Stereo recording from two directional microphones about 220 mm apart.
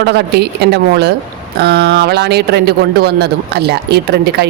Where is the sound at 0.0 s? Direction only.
50° right (ahead or behind).